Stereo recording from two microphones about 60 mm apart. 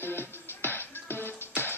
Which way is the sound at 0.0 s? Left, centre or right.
Left.